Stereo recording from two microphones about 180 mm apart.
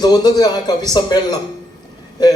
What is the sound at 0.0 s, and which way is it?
A man's voice, 20° left (ahead or behind).